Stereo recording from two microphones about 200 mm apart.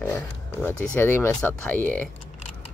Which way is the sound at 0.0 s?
10° left (ahead or behind).